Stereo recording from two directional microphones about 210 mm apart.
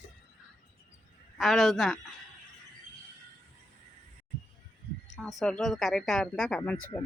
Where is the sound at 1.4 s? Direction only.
Centre (ahead or behind).